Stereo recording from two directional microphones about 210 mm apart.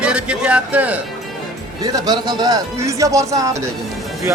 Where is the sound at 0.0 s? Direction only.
5° right (ahead or behind).